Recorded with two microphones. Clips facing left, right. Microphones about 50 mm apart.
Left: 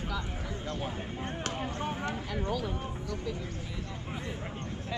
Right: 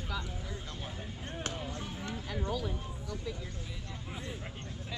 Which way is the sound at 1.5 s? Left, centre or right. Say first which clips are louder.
Left 6 dB; left.